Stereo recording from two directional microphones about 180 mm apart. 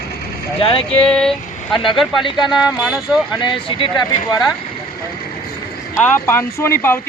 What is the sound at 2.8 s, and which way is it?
Speech, 5° right (ahead or behind).